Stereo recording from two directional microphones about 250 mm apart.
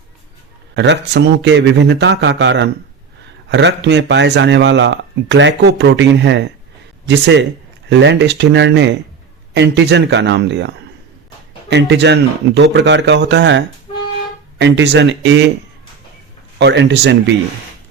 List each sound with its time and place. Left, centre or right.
0.8 s speech: right
11.7 s speech: right
16.6 s speech: right